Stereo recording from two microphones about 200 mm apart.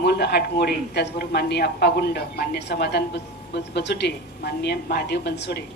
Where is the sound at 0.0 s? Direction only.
55° left (ahead or behind).